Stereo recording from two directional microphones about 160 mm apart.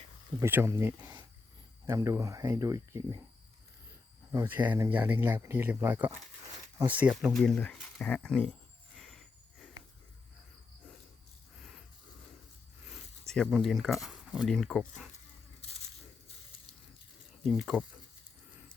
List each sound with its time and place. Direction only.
0.3 s speech: 15° right (ahead or behind)
4.3 s speech: 15° right (ahead or behind); by 8.5 s 5° left (ahead or behind)
9.0 s a sound: centre (ahead or behind)
12.8 s speech: centre (ahead or behind)
17.4 s speech: centre (ahead or behind)